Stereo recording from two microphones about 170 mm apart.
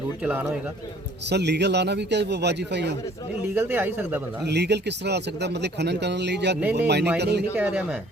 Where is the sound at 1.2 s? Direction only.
85° right.